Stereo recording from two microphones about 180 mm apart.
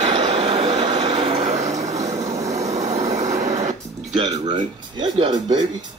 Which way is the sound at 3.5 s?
40° right (ahead or behind).